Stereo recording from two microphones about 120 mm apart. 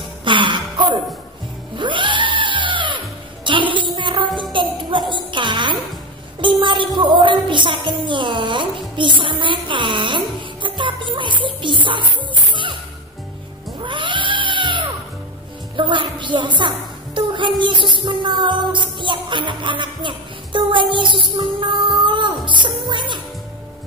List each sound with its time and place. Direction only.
0.2 s a sound: 45° right (ahead or behind)
1.8 s music: 40° right (ahead or behind)
3.4 s a sound: 45° right (ahead or behind)
4.4 s music: 40° right (ahead or behind)
13.7 s cat: 40° right (ahead or behind)
15.7 s music: 45° right (ahead or behind)